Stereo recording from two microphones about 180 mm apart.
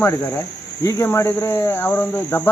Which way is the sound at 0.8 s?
15° left (ahead or behind).